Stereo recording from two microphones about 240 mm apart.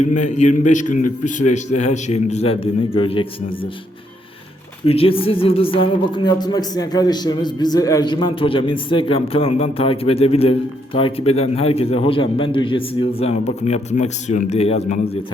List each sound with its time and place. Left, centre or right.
0.0 s a man's voice: left
4.9 s speech: left